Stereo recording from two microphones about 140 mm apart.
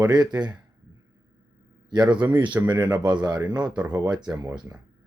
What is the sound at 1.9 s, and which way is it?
A man's voice, 30° right (ahead or behind).